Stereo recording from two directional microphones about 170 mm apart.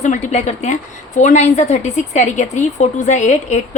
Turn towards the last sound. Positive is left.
turn(degrees=45)  # may be behind; listen again after turning